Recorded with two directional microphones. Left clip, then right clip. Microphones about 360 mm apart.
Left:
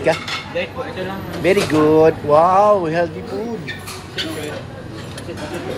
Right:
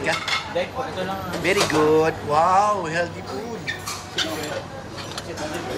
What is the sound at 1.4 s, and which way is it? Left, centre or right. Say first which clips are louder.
Speech: left 5 dB; centre.